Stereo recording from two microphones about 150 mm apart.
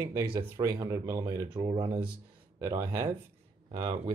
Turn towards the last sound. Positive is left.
turn(degrees=-30)  # may be behind; listen again after turning